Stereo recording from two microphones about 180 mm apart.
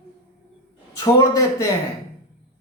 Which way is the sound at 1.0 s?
20° left (ahead or behind).